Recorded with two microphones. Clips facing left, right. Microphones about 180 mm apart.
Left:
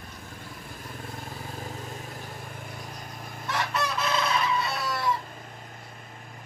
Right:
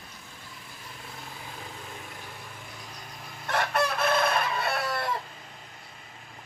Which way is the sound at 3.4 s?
55° right (ahead or behind).